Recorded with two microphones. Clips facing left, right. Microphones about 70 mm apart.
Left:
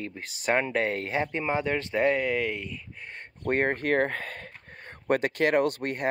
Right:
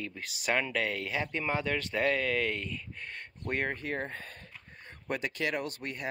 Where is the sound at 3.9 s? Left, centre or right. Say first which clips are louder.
Left 10 dB; left.